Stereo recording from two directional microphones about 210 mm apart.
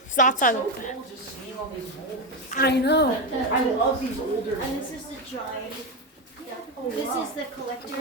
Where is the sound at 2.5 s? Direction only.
50° left (ahead or behind).